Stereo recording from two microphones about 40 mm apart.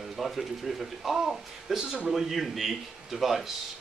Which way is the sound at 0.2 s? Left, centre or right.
Centre.